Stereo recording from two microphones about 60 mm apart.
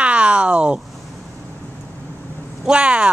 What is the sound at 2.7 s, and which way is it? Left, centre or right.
Speech, centre.